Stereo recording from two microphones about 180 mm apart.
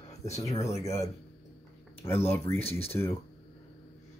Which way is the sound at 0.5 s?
15° left (ahead or behind).